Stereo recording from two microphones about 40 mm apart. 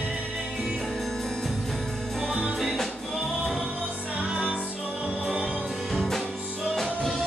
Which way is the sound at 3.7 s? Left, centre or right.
Right.